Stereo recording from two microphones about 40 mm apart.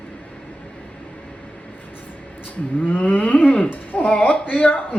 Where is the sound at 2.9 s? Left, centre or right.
Left.